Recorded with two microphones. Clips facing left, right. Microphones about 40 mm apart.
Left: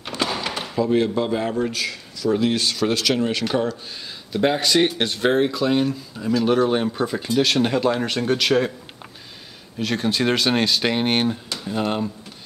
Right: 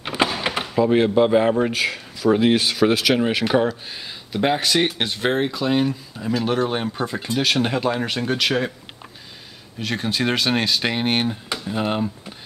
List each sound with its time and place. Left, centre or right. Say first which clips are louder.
0.1 s door: right 4 dB; centre
0.5 s speech: right 2 dB; right; by 8.7 s centre
9.8 s speech: left 2 dB; centre